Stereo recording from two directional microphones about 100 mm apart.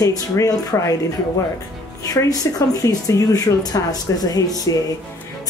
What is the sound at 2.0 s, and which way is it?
Speech, 35° left (ahead or behind).